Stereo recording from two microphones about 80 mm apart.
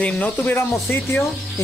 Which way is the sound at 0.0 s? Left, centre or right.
Left.